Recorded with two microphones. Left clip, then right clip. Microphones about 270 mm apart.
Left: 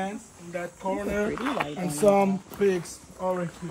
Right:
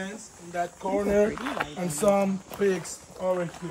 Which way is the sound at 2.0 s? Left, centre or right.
Right.